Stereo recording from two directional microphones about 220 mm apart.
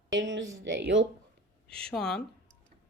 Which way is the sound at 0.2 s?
55° right (ahead or behind).